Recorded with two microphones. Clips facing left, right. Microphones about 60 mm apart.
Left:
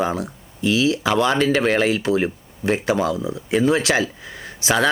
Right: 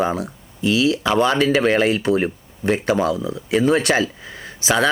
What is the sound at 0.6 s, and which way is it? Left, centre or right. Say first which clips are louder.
Speech: right 1 dB; right.